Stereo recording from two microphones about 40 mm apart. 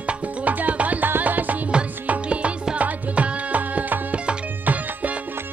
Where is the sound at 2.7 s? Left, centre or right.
Right.